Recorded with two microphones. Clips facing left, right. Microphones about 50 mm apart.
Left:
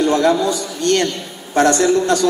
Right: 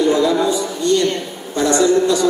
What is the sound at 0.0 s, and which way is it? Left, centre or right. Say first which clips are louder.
A man's voice: even; left.